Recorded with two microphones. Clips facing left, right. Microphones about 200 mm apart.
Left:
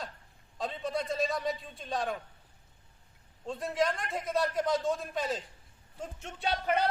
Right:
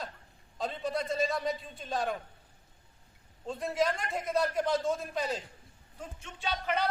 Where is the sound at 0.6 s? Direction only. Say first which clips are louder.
Right 1 dB; centre (ahead or behind).